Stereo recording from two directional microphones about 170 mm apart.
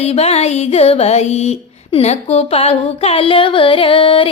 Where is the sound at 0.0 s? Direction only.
35° left (ahead or behind).